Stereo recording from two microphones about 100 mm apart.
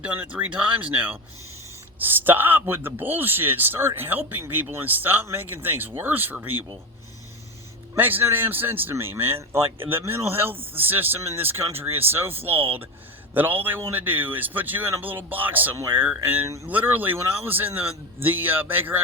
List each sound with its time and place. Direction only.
0.0 s a man's voice: 15° right (ahead or behind)
7.9 s a man's voice: 20° right (ahead or behind)